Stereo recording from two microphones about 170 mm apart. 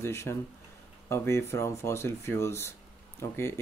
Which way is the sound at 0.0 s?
15° left (ahead or behind).